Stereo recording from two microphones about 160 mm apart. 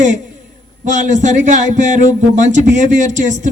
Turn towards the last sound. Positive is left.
turn(degrees=-50)  # may be behind; listen again after turning